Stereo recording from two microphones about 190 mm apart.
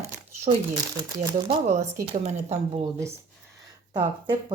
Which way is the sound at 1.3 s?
25° right (ahead or behind).